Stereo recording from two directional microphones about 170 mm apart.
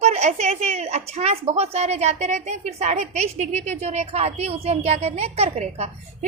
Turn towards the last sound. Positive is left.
turn(degrees=-40)  # may be behind; listen again after turning